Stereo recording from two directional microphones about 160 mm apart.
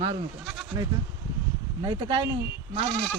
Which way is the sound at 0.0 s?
35° right (ahead or behind).